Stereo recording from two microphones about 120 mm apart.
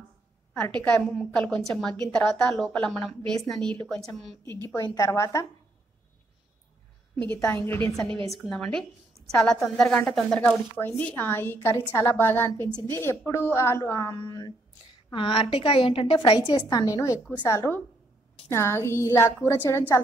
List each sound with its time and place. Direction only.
0.7 s a woman's voice: 10° left (ahead or behind)
4.6 s a woman's voice: 25° left (ahead or behind)
7.5 s a woman's voice: 20° left (ahead or behind)
8.3 s a woman's voice: centre (ahead or behind); by 19.8 s 25° left (ahead or behind)